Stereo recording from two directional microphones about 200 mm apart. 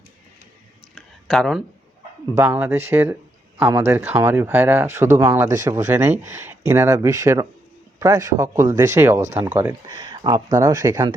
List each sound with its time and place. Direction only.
0.9 s a sound: centre (ahead or behind)
2.3 s speech: 10° right (ahead or behind)
10.0 s speech: 20° right (ahead or behind)